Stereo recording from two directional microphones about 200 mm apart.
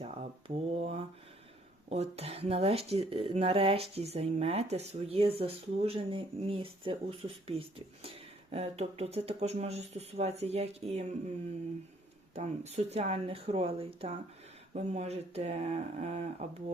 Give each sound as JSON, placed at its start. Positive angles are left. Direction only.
{"t": 0.0, "sound": "a sound", "side_deg": -30}
{"t": 1.9, "sound": "speech", "side_deg": -30}
{"t": 12.3, "sound": "speech", "side_deg": -35}